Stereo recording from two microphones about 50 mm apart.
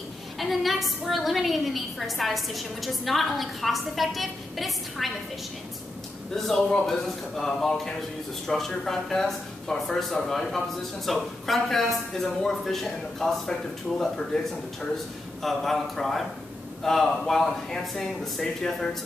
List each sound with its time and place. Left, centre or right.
0.4 s a woman's voice: centre
6.3 s a woman's voice: centre